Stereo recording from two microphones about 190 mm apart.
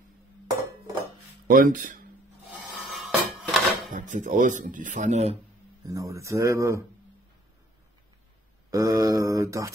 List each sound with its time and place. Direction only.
1.5 s speech: 45° right (ahead or behind)
2.5 s a sound: centre (ahead or behind)
3.9 s speech: 40° right (ahead or behind)
5.9 s mantra: 15° right (ahead or behind)
8.6 s mantra: 15° right (ahead or behind)